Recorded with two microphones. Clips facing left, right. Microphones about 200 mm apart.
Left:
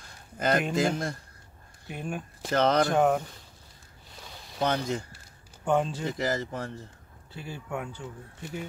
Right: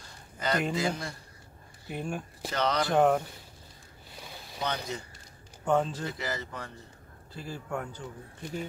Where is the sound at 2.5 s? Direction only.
50° left (ahead or behind).